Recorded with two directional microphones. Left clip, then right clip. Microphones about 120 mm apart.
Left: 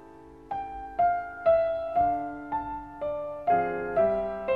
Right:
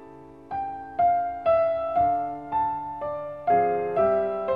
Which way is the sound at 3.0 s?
20° right (ahead or behind).